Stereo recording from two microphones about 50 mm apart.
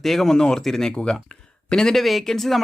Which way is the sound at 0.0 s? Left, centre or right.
Centre.